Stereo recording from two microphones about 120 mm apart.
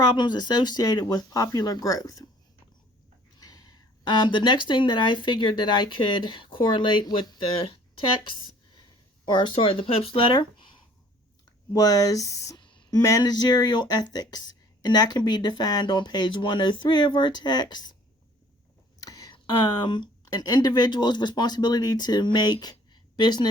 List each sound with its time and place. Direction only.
0.0 s speech: 35° left (ahead or behind)
3.4 s speech: 30° left (ahead or behind)
11.7 s speech: 30° left (ahead or behind)
12.5 s speech: 40° left (ahead or behind)
18.9 s a sound: 30° left (ahead or behind)
19.3 s speech: 40° left (ahead or behind)
22.6 s a sound: 40° left (ahead or behind)